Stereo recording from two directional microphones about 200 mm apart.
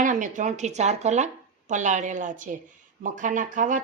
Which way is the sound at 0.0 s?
40° right (ahead or behind).